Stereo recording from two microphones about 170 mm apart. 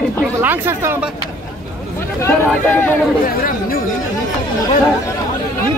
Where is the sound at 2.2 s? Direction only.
10° left (ahead or behind).